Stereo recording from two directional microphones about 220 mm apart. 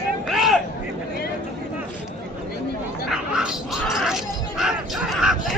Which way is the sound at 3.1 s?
5° right (ahead or behind).